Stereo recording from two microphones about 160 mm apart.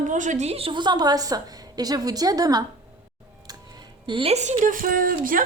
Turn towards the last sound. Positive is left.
turn(degrees=-60)  # may be behind; listen again after turning